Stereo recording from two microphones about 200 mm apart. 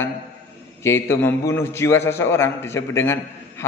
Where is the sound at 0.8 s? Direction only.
10° left (ahead or behind).